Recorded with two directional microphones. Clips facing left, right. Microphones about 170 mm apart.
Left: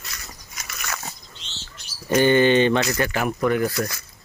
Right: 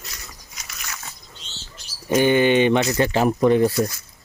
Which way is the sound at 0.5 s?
55° left (ahead or behind).